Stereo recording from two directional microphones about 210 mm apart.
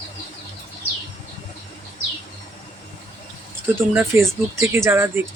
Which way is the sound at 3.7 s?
10° right (ahead or behind).